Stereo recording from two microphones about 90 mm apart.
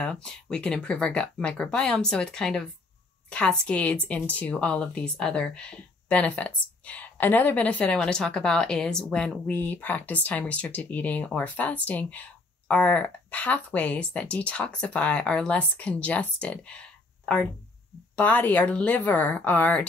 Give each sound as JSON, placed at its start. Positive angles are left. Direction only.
{"t": 0.0, "sound": "speech", "side_deg": 10}
{"t": 18.1, "sound": "speech", "side_deg": 15}